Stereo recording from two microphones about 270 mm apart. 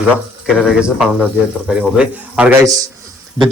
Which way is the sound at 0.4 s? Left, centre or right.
Centre.